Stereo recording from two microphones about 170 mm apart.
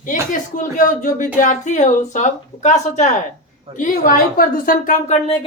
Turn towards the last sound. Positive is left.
turn(degrees=40)  # may be behind; listen again after turning